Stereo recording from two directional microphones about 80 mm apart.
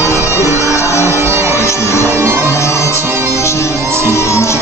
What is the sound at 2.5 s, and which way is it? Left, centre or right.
Music, left.